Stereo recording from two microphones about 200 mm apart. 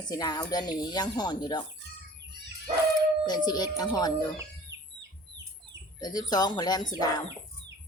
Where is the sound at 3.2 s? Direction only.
20° left (ahead or behind).